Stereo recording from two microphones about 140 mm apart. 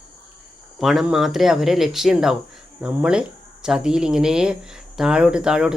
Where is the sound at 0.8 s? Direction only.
Centre (ahead or behind).